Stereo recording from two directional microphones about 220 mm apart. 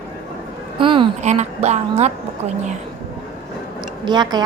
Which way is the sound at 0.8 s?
20° right (ahead or behind).